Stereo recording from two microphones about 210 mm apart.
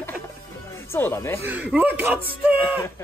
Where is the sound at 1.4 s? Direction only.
5° right (ahead or behind).